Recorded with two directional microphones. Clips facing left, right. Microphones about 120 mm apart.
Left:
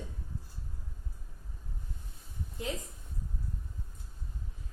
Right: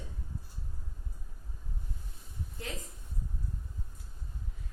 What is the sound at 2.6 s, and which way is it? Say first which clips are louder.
Speech: left 5 dB; 20° left (ahead or behind).